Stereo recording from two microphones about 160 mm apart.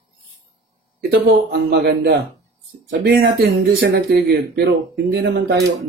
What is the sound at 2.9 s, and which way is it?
Speech, 70° right (ahead or behind).